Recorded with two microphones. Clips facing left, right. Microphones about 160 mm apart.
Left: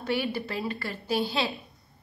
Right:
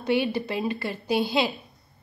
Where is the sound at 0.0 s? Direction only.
20° right (ahead or behind).